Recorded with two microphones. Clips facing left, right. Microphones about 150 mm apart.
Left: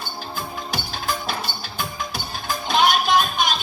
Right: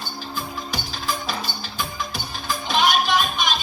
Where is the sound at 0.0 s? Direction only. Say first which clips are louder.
Even; 50° left (ahead or behind).